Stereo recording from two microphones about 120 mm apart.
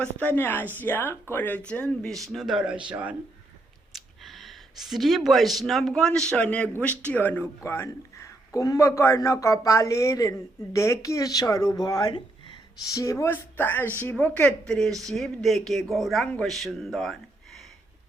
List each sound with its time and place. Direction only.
0.0 s speech: 15° left (ahead or behind); by 3.2 s 10° right (ahead or behind)
3.9 s a man's voice: centre (ahead or behind); by 13.0 s 35° left (ahead or behind)
13.0 s speech: 25° left (ahead or behind); by 17.7 s centre (ahead or behind)